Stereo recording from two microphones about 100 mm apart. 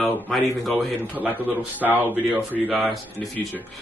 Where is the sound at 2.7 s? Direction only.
Centre (ahead or behind).